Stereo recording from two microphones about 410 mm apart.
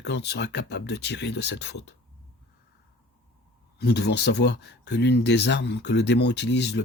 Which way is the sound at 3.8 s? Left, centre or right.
Left.